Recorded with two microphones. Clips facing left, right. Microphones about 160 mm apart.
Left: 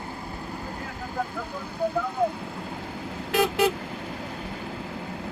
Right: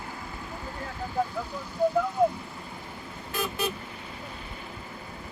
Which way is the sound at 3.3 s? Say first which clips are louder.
Left 9 dB; 90° left.